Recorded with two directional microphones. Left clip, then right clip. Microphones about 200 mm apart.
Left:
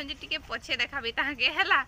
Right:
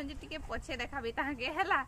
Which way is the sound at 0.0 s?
5° right (ahead or behind).